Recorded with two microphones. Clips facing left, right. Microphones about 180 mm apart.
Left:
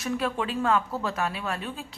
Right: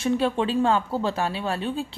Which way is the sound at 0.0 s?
30° right (ahead or behind).